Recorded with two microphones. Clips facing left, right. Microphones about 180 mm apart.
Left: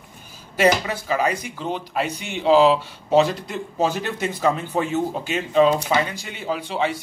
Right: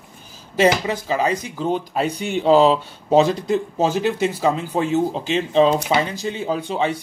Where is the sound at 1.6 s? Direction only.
40° right (ahead or behind).